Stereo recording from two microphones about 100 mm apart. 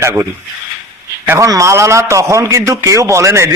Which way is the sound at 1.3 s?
30° right (ahead or behind).